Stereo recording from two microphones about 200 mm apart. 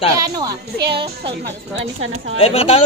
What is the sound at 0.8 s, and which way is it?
Speech, 55° right (ahead or behind).